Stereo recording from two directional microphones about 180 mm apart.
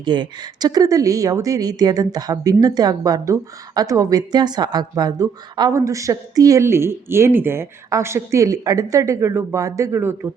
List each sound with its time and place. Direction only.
0.0 s speech: 25° right (ahead or behind)